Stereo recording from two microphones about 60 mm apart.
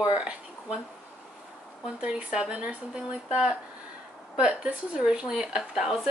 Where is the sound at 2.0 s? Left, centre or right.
Centre.